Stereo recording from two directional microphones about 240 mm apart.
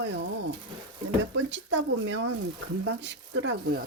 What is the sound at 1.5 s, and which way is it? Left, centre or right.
Speech, right.